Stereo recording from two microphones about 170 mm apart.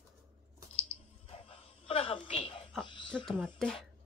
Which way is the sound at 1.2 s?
35° left (ahead or behind).